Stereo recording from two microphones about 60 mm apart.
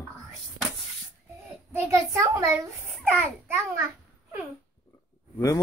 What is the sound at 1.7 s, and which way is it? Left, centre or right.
Speech, right.